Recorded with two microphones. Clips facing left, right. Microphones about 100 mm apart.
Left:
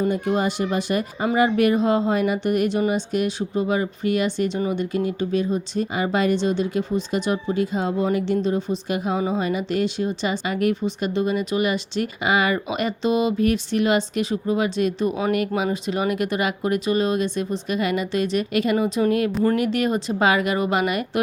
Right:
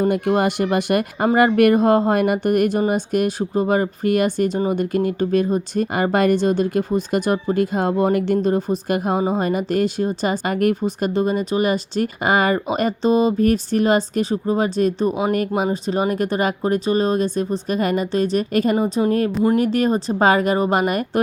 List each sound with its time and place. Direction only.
0.0 s speech: 55° right (ahead or behind)